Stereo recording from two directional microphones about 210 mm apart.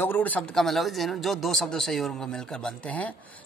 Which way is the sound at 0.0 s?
10° left (ahead or behind).